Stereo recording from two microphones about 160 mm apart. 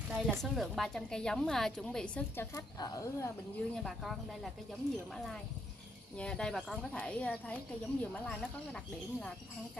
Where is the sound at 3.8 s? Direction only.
Centre (ahead or behind).